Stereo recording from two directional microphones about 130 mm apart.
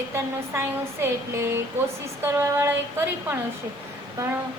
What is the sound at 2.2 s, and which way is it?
Female singing, 20° right (ahead or behind).